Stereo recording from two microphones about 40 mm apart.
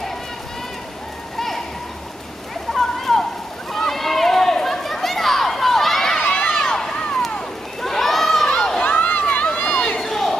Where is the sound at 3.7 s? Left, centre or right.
Centre.